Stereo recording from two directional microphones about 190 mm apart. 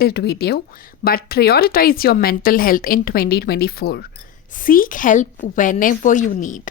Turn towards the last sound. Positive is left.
turn(degrees=45)  # may be behind; listen again after turning